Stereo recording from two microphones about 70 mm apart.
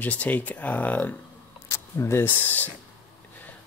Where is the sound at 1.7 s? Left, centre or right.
Left.